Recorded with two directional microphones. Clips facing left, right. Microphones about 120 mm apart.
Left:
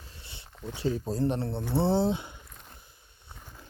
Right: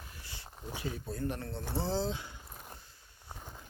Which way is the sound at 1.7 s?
60° left (ahead or behind).